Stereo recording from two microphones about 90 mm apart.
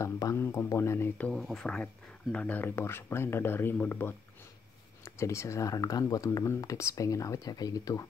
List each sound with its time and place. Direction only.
0.4 s a sound: 30° left (ahead or behind)
1.3 s speech: 5° left (ahead or behind)
2.3 s speech: 15° left (ahead or behind); by 8.1 s 40° left (ahead or behind)